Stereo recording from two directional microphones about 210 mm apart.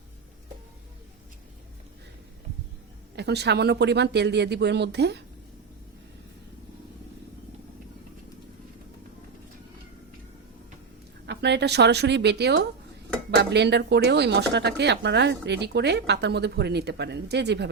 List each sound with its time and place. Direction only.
3.2 s speech: 55° right (ahead or behind)
11.3 s speech: 55° right (ahead or behind)